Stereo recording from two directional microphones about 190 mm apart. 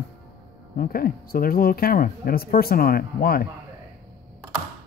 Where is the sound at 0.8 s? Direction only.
50° left (ahead or behind).